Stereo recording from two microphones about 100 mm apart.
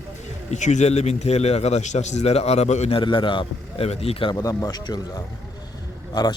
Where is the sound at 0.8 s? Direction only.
90° left.